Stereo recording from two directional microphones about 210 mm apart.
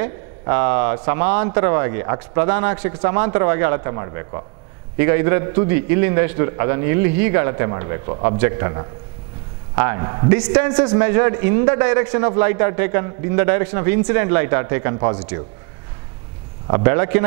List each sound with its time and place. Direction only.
0.0 s a man's voice: 15° right (ahead or behind)
10.6 s a man's voice: 10° right (ahead or behind)
16.6 s a man's voice: 20° right (ahead or behind)